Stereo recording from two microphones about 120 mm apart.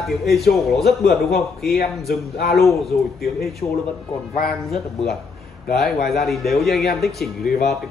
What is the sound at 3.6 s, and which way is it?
Speech, 35° left (ahead or behind).